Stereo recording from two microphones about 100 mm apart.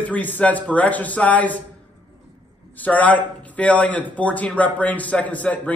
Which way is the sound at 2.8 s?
15° left (ahead or behind).